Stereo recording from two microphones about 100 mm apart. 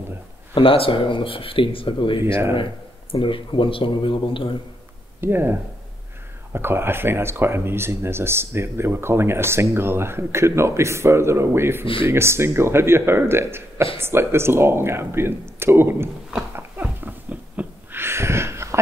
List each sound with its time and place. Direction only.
0.6 s speech: 65° left (ahead or behind)
5.2 s speech: 20° right (ahead or behind)
11.8 s speech: 60° left (ahead or behind)
12.1 s speech: 25° right (ahead or behind)
16.5 s a sound: 20° right (ahead or behind)